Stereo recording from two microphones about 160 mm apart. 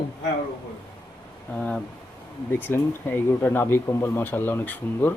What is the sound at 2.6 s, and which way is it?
Speech, 10° left (ahead or behind).